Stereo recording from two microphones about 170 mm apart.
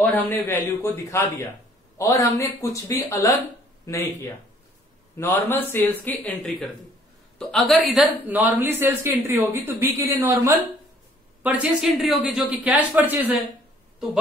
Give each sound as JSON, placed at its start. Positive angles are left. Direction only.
{"t": 0.0, "sound": "a man's voice", "side_deg": 10}